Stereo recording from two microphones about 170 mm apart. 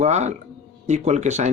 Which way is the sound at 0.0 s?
40° right (ahead or behind).